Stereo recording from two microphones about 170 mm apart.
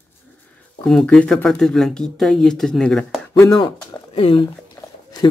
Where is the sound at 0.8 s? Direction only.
5° left (ahead or behind).